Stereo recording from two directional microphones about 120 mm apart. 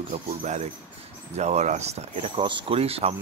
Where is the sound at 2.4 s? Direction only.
45° right (ahead or behind).